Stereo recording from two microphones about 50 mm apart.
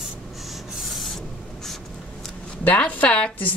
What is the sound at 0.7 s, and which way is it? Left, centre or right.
Rub, centre.